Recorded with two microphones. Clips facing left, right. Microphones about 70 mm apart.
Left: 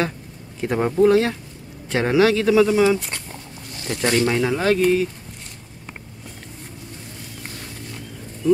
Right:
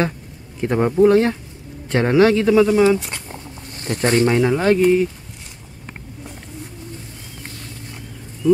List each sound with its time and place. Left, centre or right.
0.6 s speech: centre
3.7 s speech: right
4.3 s speech: centre